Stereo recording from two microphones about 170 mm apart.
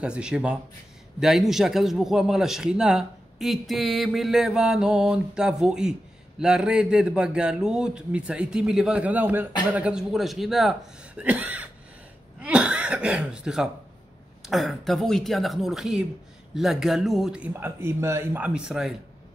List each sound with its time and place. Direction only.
0.0 s a man's voice: 5° right (ahead or behind)